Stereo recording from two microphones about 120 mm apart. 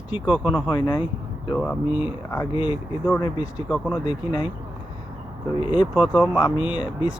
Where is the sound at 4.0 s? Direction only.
45° left (ahead or behind).